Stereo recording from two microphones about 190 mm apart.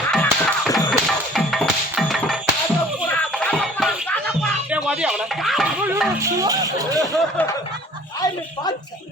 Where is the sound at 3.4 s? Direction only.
Centre (ahead or behind).